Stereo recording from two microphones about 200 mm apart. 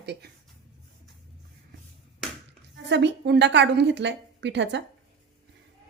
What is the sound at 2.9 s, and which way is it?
A woman's voice, 60° right (ahead or behind).